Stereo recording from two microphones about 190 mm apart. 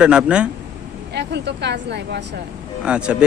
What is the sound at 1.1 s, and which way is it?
Speech, 65° right (ahead or behind).